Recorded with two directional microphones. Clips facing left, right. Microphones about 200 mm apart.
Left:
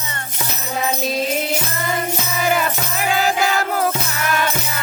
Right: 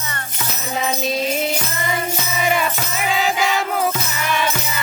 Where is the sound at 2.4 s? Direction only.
Centre (ahead or behind).